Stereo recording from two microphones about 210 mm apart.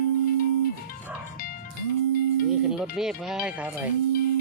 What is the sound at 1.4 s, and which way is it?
Music, 45° left (ahead or behind).